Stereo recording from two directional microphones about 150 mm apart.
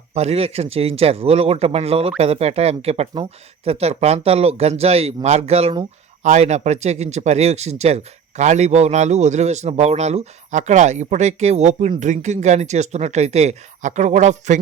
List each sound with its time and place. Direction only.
0.1 s speech: 45° right (ahead or behind)